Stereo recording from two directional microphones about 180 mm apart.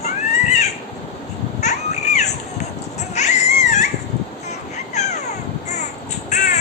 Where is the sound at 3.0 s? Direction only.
40° left (ahead or behind).